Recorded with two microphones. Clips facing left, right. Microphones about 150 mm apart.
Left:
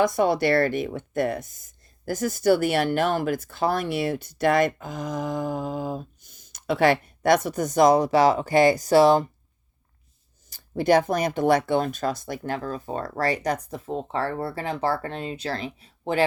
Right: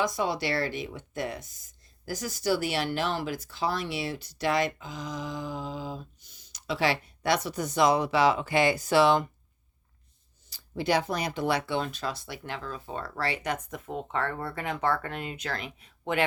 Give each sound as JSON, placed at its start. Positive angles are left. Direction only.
{"t": 0.0, "sound": "speech", "side_deg": 55}
{"t": 10.5, "sound": "speech", "side_deg": 50}